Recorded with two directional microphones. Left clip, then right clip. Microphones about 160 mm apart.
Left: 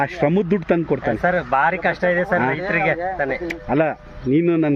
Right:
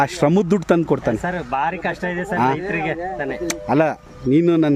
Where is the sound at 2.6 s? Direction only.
30° left (ahead or behind).